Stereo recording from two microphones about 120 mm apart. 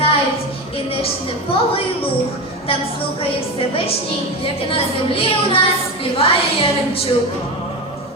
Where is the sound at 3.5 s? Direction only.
50° left (ahead or behind).